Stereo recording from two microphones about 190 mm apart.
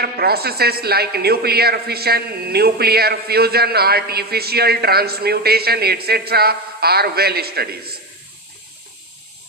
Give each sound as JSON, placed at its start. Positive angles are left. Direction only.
{"t": 0.0, "sound": "a man's voice", "side_deg": -55}